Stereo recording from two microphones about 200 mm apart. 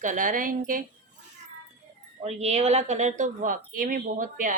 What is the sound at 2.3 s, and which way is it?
Speech, 30° right (ahead or behind).